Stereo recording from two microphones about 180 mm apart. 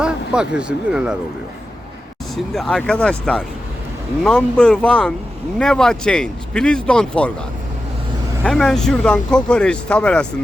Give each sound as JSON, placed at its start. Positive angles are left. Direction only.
{"t": 0.0, "sound": "speech", "side_deg": -5}
{"t": 2.3, "sound": "speech", "side_deg": 0}
{"t": 8.4, "sound": "speech", "side_deg": 5}